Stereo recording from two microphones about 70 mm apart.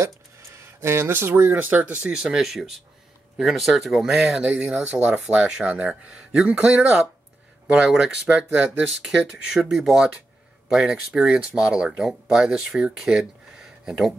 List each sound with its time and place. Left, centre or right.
0.0 s speech: right; by 2.1 s centre
2.1 s speech: centre